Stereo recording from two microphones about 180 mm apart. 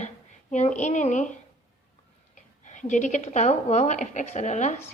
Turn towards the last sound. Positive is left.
turn(degrees=40)  # may be behind; listen again after turning